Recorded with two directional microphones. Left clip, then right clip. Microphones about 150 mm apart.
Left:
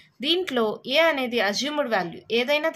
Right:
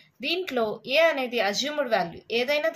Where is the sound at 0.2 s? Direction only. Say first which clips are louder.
Left 3 dB; 40° left (ahead or behind).